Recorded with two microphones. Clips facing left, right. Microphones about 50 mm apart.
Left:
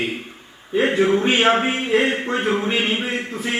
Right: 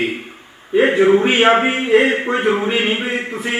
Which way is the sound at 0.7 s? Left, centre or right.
Centre.